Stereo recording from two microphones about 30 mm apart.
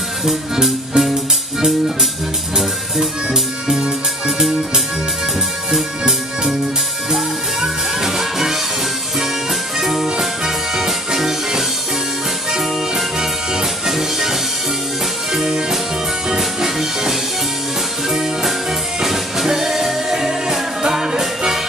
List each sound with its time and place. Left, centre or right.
0.3 s music: centre
1.0 s music: right
3.3 s music: right
7.6 s music: centre
9.8 s music: centre
16.3 s music: centre
19.0 s music: centre